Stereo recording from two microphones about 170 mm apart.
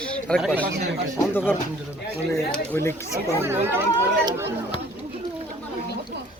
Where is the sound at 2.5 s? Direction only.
10° left (ahead or behind).